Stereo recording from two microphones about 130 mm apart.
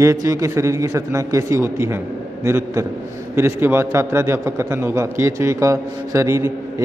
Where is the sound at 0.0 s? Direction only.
25° right (ahead or behind).